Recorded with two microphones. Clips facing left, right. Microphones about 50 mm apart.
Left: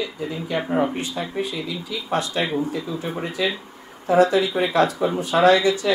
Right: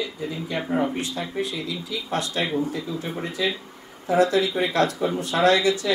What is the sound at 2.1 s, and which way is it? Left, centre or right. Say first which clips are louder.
Speech: left 3 dB; left.